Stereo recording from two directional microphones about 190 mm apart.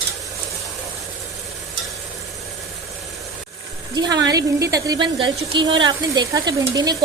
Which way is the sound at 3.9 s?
20° right (ahead or behind).